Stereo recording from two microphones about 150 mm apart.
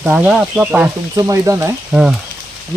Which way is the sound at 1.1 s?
20° right (ahead or behind).